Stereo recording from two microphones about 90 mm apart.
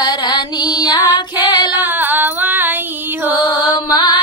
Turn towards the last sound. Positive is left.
turn(degrees=60)  # may be behind; listen again after turning